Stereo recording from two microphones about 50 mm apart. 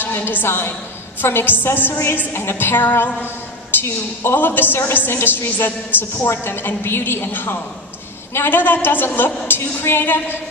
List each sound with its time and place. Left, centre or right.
0.0 s a woman's voice: left
3.7 s a sound: left
4.2 s a woman's voice: left